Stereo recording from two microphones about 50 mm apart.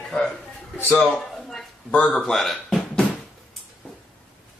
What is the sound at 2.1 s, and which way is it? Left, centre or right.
Speech, centre.